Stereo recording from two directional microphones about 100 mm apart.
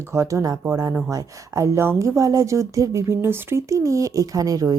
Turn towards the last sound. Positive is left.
turn(degrees=-35)  # may be behind; listen again after turning